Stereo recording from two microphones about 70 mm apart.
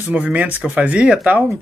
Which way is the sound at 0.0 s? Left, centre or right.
Right.